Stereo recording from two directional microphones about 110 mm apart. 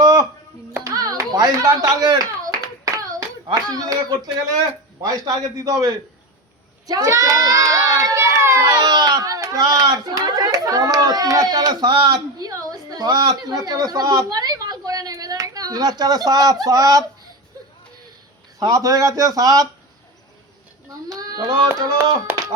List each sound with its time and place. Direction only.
0.0 s a sound: 35° right (ahead or behind)
0.9 s clapping: 30° right (ahead or behind)
3.5 s a man's voice: 35° right (ahead or behind)
6.8 s crowd: 30° right (ahead or behind)
8.6 s a child's voice: 40° right (ahead or behind)
18.6 s a man's voice: 30° right (ahead or behind)
21.1 s child singing: 35° right (ahead or behind)